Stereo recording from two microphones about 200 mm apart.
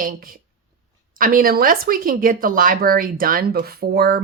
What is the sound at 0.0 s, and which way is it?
Speech, 45° right (ahead or behind).